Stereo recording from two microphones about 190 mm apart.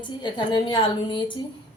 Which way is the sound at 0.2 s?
25° left (ahead or behind).